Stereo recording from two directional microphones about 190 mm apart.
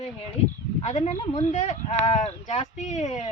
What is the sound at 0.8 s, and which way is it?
Speech, 35° left (ahead or behind).